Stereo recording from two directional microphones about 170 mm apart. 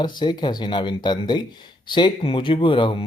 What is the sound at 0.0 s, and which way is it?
Speech, 25° left (ahead or behind).